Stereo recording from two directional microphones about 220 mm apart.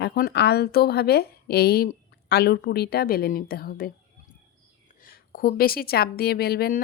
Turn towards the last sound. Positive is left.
turn(degrees=45)  # may be behind; listen again after turning